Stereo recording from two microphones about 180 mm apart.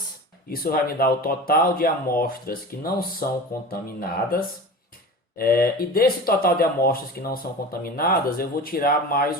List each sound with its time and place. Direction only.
0.5 s speech: 55° left (ahead or behind)
5.4 s speech: 55° left (ahead or behind)